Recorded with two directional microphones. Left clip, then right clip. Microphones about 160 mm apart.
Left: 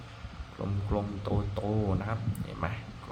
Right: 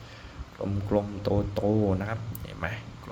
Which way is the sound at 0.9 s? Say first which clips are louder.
Right 7 dB; 35° right (ahead or behind).